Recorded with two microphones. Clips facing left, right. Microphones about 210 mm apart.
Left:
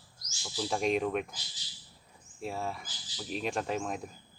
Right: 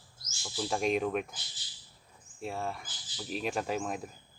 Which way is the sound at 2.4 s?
Centre (ahead or behind).